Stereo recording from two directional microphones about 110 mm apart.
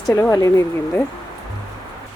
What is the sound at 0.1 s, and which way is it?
Speech, 30° left (ahead or behind).